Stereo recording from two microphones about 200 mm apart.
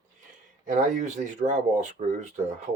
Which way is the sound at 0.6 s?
40° right (ahead or behind).